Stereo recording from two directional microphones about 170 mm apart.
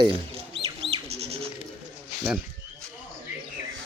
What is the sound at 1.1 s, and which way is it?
Goat, 35° right (ahead or behind).